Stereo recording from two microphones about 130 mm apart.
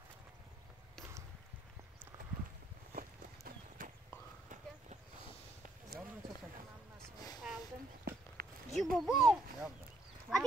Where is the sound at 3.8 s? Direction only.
90° right.